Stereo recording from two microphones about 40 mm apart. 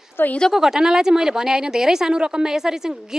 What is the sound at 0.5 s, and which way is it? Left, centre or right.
Speech, centre.